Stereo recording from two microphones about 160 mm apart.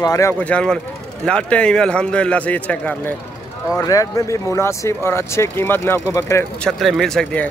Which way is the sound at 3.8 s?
20° left (ahead or behind).